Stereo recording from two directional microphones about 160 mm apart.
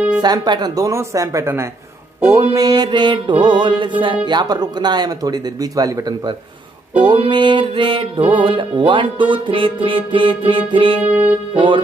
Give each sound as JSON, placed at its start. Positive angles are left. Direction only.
{"t": 0.2, "sound": "speech", "side_deg": -25}
{"t": 7.1, "sound": "music", "side_deg": -30}
{"t": 11.1, "sound": "music", "side_deg": -10}
{"t": 11.5, "sound": "music", "side_deg": -30}